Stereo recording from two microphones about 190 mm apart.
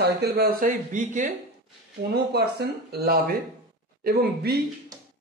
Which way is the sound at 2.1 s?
60° right (ahead or behind).